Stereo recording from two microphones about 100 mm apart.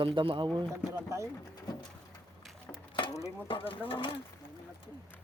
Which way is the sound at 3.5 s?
60° left (ahead or behind).